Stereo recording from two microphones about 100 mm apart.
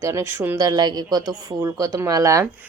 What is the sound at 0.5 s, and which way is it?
A woman's voice, 40° right (ahead or behind).